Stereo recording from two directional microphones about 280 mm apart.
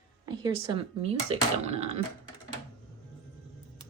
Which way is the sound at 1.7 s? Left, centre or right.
Right.